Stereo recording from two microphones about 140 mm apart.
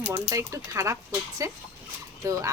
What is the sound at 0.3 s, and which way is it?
Speech, 20° right (ahead or behind).